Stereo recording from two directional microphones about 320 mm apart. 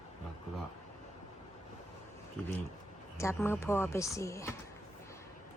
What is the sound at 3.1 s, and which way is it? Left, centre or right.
A woman's voice, centre.